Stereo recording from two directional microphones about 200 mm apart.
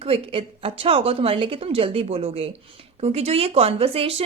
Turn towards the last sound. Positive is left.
turn(degrees=-30)  # may be behind; listen again after turning